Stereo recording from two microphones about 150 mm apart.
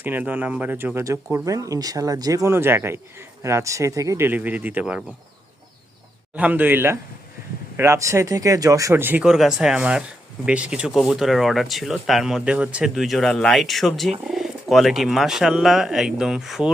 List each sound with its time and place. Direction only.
0.0 s speech: 10° right (ahead or behind)
6.3 s speech: 10° right (ahead or behind)